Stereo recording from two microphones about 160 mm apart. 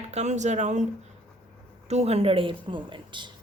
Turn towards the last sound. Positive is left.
turn(degrees=-30)  # may be behind; listen again after turning